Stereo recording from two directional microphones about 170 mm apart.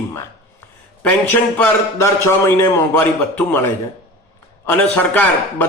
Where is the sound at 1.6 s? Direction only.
15° left (ahead or behind).